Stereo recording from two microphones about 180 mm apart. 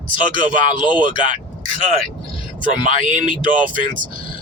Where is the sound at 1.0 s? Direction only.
50° right (ahead or behind).